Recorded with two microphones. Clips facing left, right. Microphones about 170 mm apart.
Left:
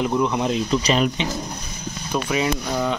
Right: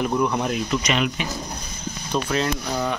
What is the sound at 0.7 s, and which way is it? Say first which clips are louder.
Speech: left 3 dB; 35° left (ahead or behind).